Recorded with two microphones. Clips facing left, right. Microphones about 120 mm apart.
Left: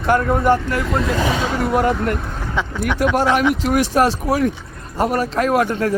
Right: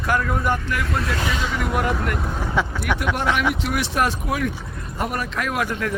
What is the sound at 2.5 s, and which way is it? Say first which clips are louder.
Speech: left 2 dB; 10° right (ahead or behind).